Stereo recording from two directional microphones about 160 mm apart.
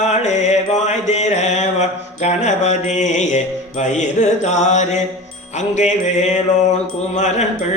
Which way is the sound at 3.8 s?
50° left (ahead or behind).